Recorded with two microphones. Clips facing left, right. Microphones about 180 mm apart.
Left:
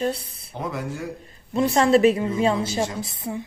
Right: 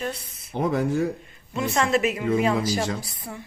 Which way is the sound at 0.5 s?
60° right (ahead or behind).